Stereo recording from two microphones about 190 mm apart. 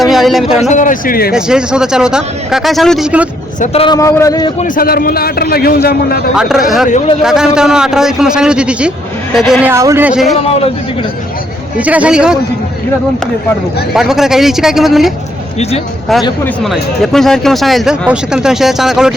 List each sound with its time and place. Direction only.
0.0 s a man's voice: centre (ahead or behind)
0.6 s a man's voice: 40° left (ahead or behind)
1.3 s speech: 5° right (ahead or behind)
3.6 s a man's voice: 30° left (ahead or behind)
3.9 s a man's voice: 15° left (ahead or behind)
4.6 s a man's voice: 45° left (ahead or behind)
6.3 s speech: 5° right (ahead or behind)
11.8 s speech: 5° right (ahead or behind)
13.9 s speech: centre (ahead or behind)
16.6 s speech: centre (ahead or behind)